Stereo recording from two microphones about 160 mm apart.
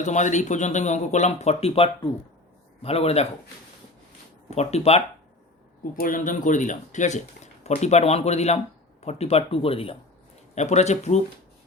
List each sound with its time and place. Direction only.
0.0 s speech: 50° left (ahead or behind)
4.4 s speech: 40° left (ahead or behind)
6.0 s speech: 55° left (ahead or behind)